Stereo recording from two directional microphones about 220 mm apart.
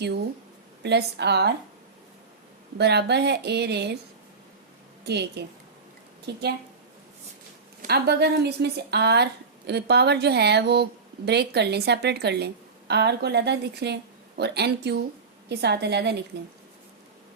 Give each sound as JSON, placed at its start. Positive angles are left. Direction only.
{"t": 0.8, "sound": "speech", "side_deg": -50}
{"t": 2.7, "sound": "speech", "side_deg": -50}
{"t": 5.0, "sound": "speech", "side_deg": -50}
{"t": 7.8, "sound": "speech", "side_deg": -45}